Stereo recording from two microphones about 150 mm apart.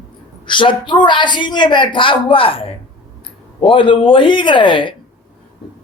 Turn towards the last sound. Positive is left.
turn(degrees=35)  # may be behind; listen again after turning